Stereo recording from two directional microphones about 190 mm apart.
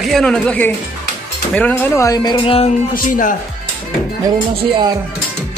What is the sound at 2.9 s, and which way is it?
Speech, 45° left (ahead or behind).